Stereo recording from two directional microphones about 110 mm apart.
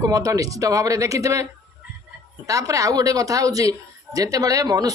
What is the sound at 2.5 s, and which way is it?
Speech, 30° right (ahead or behind).